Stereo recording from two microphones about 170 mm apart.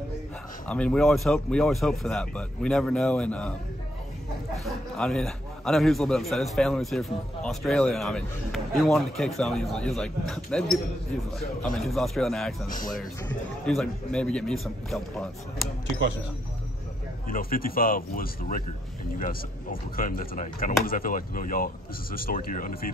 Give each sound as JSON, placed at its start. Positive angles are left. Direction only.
{"t": 0.7, "sound": "a man's voice", "side_deg": 5}
{"t": 4.6, "sound": "a man's voice", "side_deg": 0}
{"t": 12.6, "sound": "speech", "side_deg": 55}
{"t": 13.3, "sound": "a man's voice", "side_deg": 5}
{"t": 17.3, "sound": "speech", "side_deg": 55}